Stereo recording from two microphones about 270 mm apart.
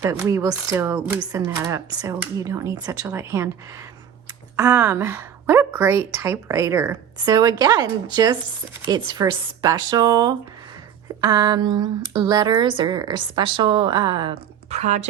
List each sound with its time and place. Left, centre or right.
0.0 s speech: centre
4.5 s speech: centre; by 15.0 s right